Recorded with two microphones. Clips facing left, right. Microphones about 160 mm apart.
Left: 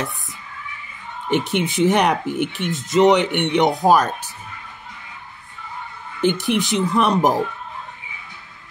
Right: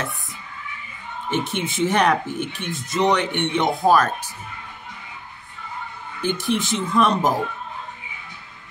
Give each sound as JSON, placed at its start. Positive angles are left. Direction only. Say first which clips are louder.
{"t": 1.3, "sound": "speech", "louder": "left 5 dB", "side_deg": 15}
{"t": 6.2, "sound": "speech", "louder": "left 4 dB", "side_deg": 20}